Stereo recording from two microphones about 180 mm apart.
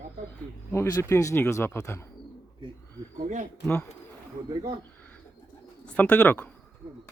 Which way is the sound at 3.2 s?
45° right (ahead or behind).